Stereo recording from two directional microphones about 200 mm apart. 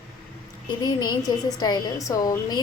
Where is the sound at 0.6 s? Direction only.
20° left (ahead or behind).